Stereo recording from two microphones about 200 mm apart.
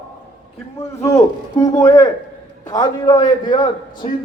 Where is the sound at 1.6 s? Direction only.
20° left (ahead or behind).